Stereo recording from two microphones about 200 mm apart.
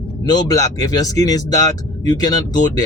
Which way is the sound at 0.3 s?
20° left (ahead or behind).